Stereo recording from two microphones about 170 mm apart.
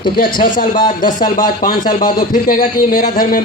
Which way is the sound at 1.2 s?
55° left (ahead or behind).